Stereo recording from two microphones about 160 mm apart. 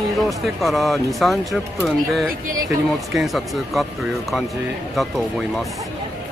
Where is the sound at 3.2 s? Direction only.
Centre (ahead or behind).